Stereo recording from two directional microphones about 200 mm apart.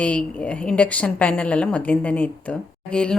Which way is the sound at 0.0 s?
5° left (ahead or behind).